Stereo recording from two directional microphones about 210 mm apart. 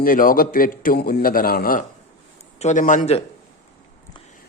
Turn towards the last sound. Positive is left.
turn(degrees=35)  # may be behind; listen again after turning